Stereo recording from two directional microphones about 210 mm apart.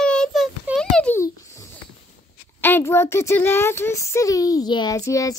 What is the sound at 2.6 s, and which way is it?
Speech, 10° left (ahead or behind).